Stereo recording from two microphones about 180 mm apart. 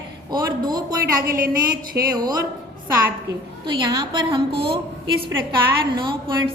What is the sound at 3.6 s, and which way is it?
A woman's voice, 25° right (ahead or behind).